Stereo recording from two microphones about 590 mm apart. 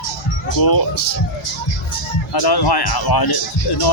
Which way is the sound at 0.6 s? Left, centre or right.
Left.